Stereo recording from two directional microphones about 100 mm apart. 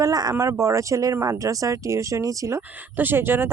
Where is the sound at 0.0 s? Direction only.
40° right (ahead or behind).